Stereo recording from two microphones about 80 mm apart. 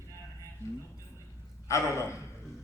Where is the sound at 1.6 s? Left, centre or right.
Left.